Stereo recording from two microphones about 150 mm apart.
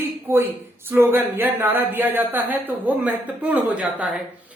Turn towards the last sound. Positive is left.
turn(degrees=-10)  # may be behind; listen again after turning